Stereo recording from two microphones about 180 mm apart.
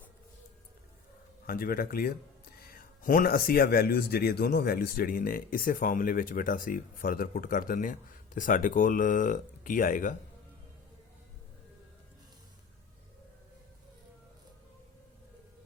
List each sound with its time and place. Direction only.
1.5 s speech: 55° left (ahead or behind)